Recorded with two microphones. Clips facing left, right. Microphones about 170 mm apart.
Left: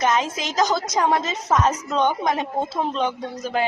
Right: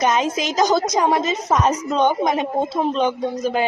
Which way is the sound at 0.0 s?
20° right (ahead or behind).